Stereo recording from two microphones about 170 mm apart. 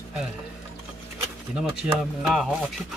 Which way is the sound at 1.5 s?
5° right (ahead or behind).